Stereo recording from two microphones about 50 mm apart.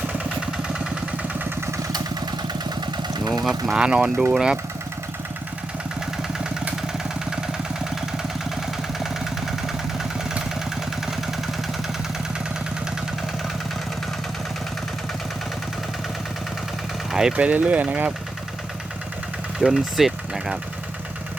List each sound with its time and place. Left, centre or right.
0.5 s vehicle: centre
3.4 s speech: centre
6.8 s vehicle: centre
17.1 s vehicle: centre
17.3 s speech: right
19.5 s speech: centre